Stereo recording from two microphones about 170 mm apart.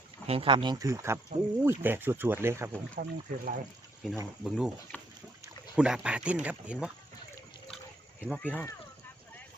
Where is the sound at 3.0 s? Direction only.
55° right (ahead or behind).